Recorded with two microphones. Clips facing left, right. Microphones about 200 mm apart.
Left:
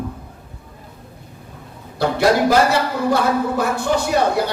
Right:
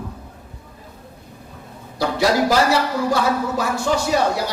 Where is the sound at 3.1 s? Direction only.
55° left (ahead or behind).